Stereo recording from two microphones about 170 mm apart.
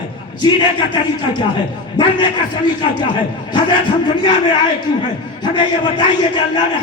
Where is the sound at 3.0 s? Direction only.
30° left (ahead or behind).